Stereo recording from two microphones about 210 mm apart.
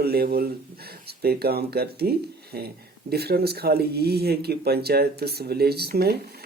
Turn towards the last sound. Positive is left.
turn(degrees=-50)  # may be behind; listen again after turning